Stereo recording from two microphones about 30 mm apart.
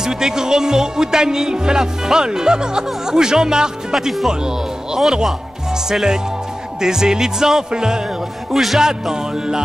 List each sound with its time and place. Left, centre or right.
0.0 s speech: centre
8.5 s music: centre
8.7 s speech: centre